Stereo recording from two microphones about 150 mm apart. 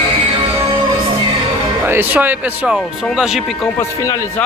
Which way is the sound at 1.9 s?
15° right (ahead or behind).